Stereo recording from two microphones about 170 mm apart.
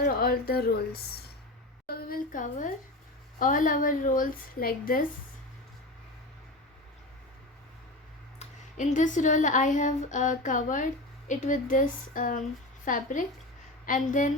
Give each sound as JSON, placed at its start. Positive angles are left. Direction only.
{"t": 0.0, "sound": "speech", "side_deg": 60}
{"t": 1.9, "sound": "a woman's voice", "side_deg": 60}
{"t": 8.4, "sound": "speech", "side_deg": 45}